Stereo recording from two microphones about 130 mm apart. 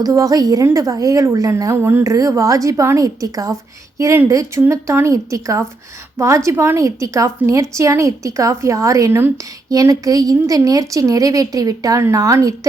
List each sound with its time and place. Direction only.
0.0 s a woman's voice: 25° right (ahead or behind)